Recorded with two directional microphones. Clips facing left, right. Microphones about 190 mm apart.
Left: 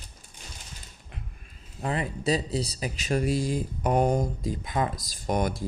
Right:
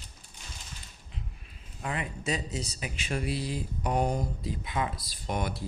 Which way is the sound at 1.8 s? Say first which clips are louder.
Left 5 dB; 35° left (ahead or behind).